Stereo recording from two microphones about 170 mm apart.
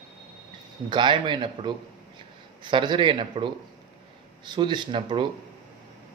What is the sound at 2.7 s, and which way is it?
Speech, 30° right (ahead or behind).